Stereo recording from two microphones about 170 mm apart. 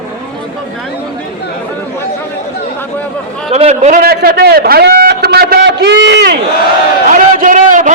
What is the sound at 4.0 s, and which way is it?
A man's voice, 65° right (ahead or behind).